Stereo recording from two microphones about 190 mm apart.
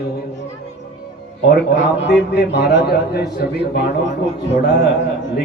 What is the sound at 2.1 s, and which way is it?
A man's voice, 65° left (ahead or behind).